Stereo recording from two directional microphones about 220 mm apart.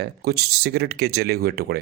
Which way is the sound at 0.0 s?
45° right (ahead or behind).